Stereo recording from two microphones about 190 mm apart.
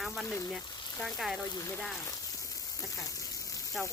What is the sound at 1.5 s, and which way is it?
Speech, 15° left (ahead or behind).